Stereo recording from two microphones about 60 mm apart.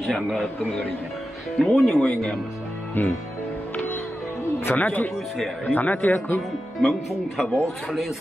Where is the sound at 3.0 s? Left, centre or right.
Left.